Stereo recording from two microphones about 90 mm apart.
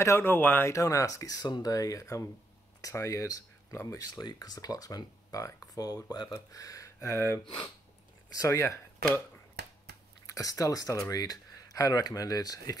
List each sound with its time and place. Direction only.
0.0 s speech: 30° left (ahead or behind)
0.7 s speech: 35° left (ahead or behind)
4.1 s speech: 50° left (ahead or behind); by 8.8 s 35° left (ahead or behind)
10.2 s speech: 40° left (ahead or behind)